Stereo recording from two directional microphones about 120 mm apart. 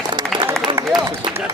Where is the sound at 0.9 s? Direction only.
40° right (ahead or behind).